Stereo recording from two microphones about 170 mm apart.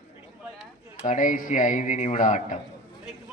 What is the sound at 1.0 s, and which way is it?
Speech, 50° left (ahead or behind).